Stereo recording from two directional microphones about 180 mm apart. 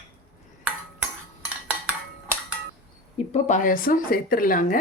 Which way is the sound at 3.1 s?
40° left (ahead or behind).